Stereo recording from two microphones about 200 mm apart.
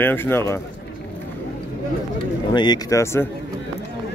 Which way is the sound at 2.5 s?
20° left (ahead or behind).